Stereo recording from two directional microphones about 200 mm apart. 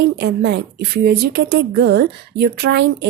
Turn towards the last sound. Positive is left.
turn(degrees=-60)  # may be behind; listen again after turning